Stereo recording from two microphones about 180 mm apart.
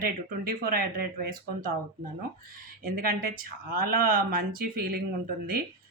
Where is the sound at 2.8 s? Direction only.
55° right (ahead or behind).